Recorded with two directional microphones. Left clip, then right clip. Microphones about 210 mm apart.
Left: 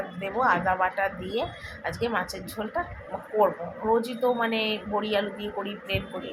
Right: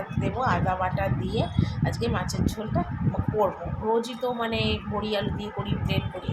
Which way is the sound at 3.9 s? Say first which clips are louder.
Left 2 dB; 10° left (ahead or behind).